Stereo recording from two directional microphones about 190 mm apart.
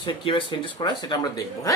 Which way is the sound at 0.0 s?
25° left (ahead or behind).